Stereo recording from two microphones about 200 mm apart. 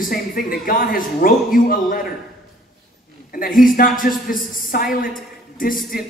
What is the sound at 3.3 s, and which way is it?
A man's voice, 45° left (ahead or behind).